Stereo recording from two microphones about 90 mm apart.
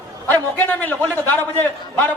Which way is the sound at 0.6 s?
20° left (ahead or behind).